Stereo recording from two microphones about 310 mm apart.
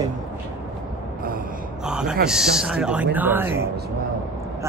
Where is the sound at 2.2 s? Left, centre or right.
Centre.